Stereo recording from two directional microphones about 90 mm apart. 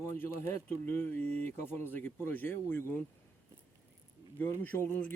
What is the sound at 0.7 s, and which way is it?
Speech, 25° left (ahead or behind).